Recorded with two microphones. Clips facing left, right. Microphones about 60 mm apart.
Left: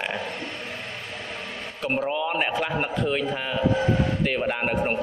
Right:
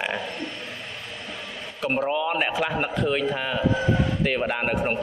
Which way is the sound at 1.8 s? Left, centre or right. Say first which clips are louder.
Right 2 dB; centre.